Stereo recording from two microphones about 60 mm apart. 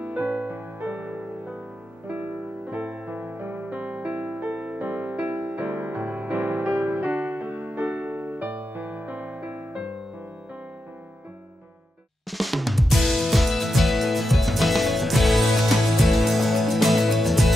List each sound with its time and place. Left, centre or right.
0.0 s music: right
0.8 s music: centre
2.0 s music: right
8.2 s music: right
12.3 s music: centre